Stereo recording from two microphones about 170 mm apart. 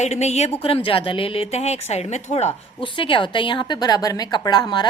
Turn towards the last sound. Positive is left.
turn(degrees=25)  # may be behind; listen again after turning